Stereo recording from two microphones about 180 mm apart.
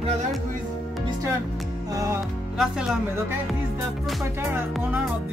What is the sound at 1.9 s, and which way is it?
Music, 20° right (ahead or behind).